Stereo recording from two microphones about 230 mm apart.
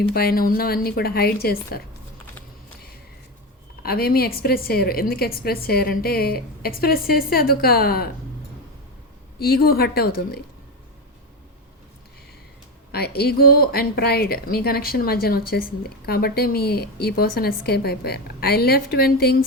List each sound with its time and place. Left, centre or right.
0.1 s speech: left
3.8 s speech: left
9.4 s speech: left
12.9 s speech: left